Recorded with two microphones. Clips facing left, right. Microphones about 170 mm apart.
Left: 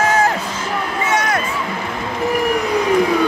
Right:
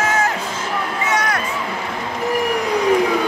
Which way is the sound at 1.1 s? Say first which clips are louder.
Left 2 dB; 25° left (ahead or behind).